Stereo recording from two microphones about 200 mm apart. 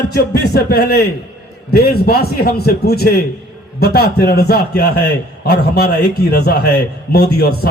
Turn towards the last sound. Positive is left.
turn(degrees=55)  # may be behind; listen again after turning